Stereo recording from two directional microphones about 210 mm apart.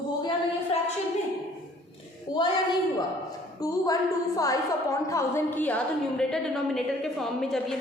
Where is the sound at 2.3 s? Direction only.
20° left (ahead or behind).